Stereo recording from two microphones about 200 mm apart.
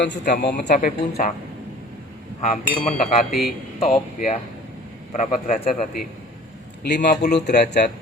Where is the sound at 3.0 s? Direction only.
40° left (ahead or behind).